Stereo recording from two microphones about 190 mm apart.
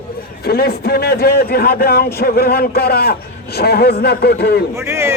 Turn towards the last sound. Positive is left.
turn(degrees=-15)  # may be behind; listen again after turning